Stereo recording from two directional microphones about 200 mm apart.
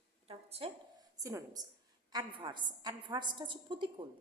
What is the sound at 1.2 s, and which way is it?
A woman's voice, 15° right (ahead or behind).